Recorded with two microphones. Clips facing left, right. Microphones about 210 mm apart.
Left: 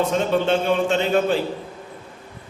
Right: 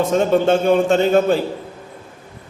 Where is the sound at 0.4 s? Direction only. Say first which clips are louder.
Right 5 dB; 45° right (ahead or behind).